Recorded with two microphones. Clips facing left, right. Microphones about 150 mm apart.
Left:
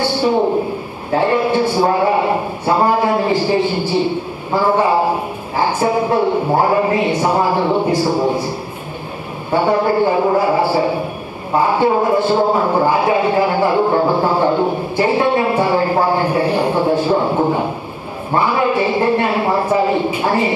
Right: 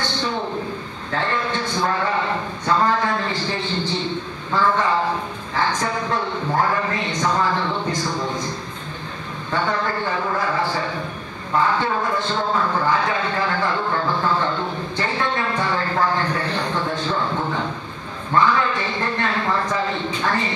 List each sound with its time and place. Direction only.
0.1 s a sound: 10° left (ahead or behind)
1.1 s a man's voice: 10° left (ahead or behind)
13.8 s speech: 40° left (ahead or behind)
14.2 s a man's voice: 10° left (ahead or behind)
17.3 s speech: 40° left (ahead or behind)
18.3 s a man's voice: 10° left (ahead or behind)